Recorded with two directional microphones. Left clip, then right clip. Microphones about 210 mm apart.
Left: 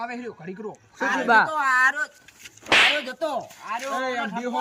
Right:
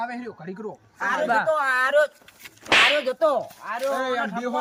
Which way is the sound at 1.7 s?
40° right (ahead or behind).